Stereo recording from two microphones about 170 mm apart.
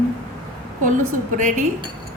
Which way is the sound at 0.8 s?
50° right (ahead or behind).